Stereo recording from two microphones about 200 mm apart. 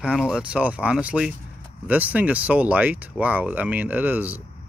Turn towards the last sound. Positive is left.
turn(degrees=-10)  # may be behind; listen again after turning